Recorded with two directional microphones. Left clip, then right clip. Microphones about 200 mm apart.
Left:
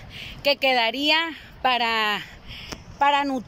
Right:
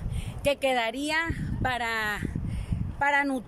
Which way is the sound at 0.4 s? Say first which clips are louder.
Left 5 dB; 5° right (ahead or behind).